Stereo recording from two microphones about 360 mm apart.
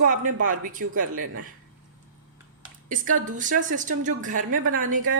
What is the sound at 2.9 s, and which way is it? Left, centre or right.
A woman's voice, right.